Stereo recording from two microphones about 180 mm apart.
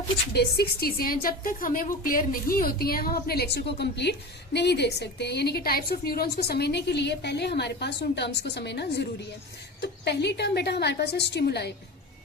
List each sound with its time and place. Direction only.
0.3 s a woman's voice: 60° left (ahead or behind)